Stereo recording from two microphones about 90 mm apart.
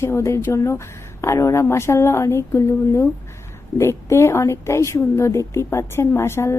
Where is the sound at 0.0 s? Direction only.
30° left (ahead or behind).